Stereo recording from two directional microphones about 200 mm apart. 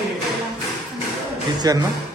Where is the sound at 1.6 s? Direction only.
20° right (ahead or behind).